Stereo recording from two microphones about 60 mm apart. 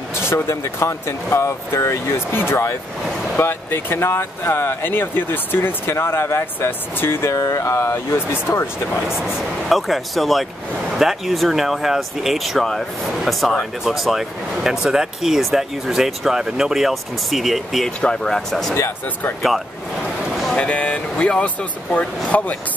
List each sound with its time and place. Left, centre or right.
0.1 s speech: left
9.1 s speech: centre
17.8 s speech: centre
20.5 s speech: left